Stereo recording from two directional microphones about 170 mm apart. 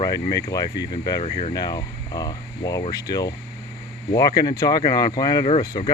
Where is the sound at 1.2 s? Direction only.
45° left (ahead or behind).